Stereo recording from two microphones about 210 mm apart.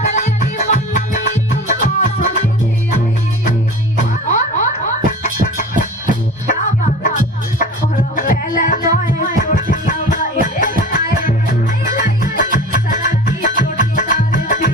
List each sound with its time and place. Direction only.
0.0 s music: 35° left (ahead or behind)
4.3 s music: 35° left (ahead or behind)